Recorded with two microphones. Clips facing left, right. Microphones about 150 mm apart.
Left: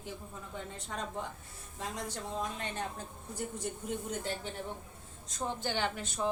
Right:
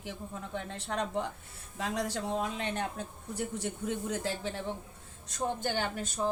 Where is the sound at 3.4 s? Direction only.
85° right.